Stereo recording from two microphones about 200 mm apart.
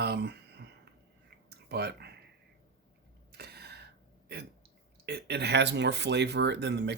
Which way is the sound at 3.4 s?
55° right (ahead or behind).